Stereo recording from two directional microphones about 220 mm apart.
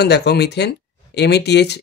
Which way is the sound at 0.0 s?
50° left (ahead or behind).